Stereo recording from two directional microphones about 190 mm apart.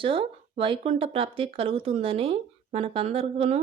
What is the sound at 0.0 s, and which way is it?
Speech, 25° right (ahead or behind).